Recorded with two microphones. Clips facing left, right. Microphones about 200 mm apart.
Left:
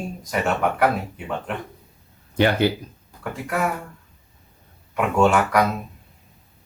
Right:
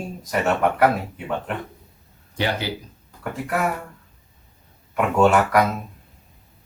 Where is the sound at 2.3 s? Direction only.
55° left (ahead or behind).